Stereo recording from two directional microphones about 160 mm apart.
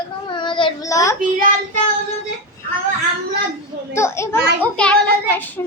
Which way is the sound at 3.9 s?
15° left (ahead or behind).